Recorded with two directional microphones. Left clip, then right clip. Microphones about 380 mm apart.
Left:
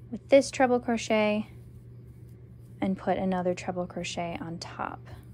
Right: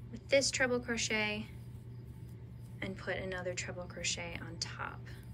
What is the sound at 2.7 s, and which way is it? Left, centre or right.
A woman's voice, centre.